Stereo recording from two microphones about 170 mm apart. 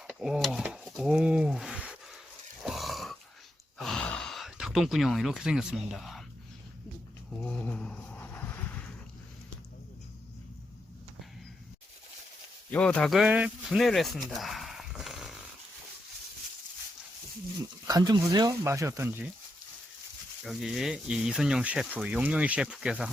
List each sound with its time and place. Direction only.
0.1 s a sound: 5° right (ahead or behind)
2.6 s grunt: centre (ahead or behind)
3.8 s sigh: centre (ahead or behind)
7.4 s a sound: 5° left (ahead or behind)
12.7 s speech: 5° left (ahead or behind)
17.6 s speech: 20° right (ahead or behind)
20.4 s speech: centre (ahead or behind)